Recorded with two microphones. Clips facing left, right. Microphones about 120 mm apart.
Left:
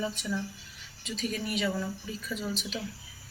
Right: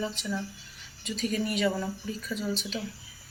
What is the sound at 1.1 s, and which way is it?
Speech, centre (ahead or behind).